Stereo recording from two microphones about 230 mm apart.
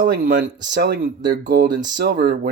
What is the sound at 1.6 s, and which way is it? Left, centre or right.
Speech, centre.